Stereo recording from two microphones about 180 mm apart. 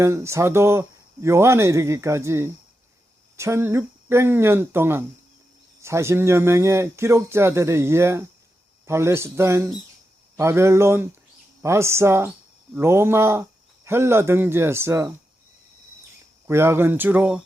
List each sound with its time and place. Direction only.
0.0 s speech: 15° right (ahead or behind)
16.5 s speech: 15° right (ahead or behind)